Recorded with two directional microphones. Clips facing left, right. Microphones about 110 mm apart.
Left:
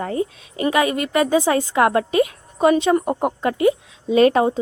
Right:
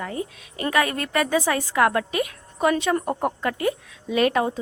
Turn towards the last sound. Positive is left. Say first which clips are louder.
# left 6 dB
turn(degrees=25)  # may be behind; listen again after turning